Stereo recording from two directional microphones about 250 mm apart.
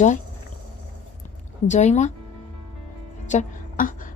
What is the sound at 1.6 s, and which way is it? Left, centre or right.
Speech, left.